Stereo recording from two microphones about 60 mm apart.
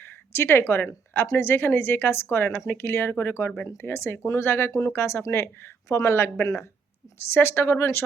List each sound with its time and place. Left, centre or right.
0.0 s a woman's voice: left